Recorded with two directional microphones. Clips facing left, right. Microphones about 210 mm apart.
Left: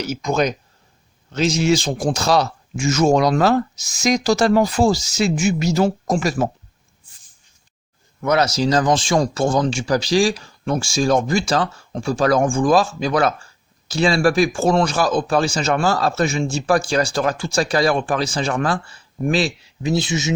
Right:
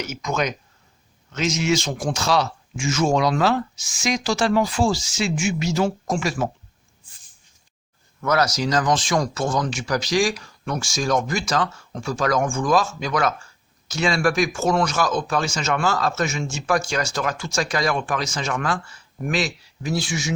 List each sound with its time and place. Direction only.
0.0 s speech: 30° left (ahead or behind)
8.2 s speech: 20° left (ahead or behind)